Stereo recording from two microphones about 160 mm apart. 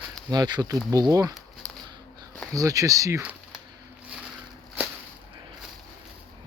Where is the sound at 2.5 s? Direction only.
20° right (ahead or behind).